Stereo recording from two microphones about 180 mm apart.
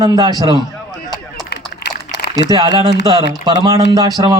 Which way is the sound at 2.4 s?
20° right (ahead or behind).